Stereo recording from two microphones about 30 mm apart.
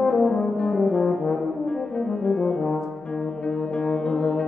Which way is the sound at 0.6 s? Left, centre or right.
Left.